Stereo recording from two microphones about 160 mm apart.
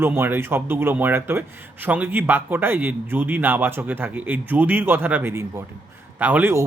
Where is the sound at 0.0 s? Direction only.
15° right (ahead or behind).